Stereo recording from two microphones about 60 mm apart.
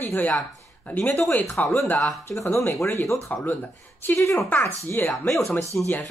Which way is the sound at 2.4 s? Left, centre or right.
Left.